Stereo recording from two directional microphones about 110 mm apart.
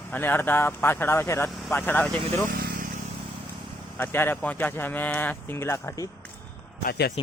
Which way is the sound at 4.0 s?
20° left (ahead or behind).